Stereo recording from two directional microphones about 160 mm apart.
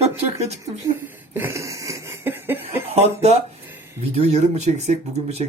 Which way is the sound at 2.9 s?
45° right (ahead or behind).